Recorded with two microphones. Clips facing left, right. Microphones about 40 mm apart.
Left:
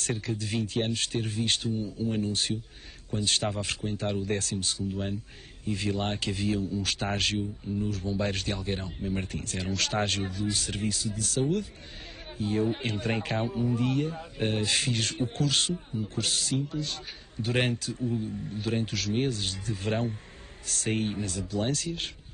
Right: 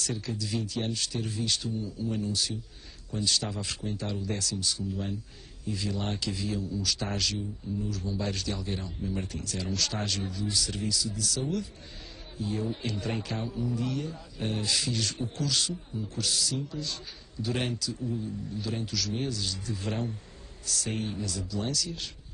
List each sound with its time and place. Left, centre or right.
0.0 s a man's voice: left